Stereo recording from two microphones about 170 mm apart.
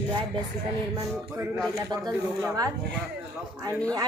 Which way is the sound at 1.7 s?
20° right (ahead or behind).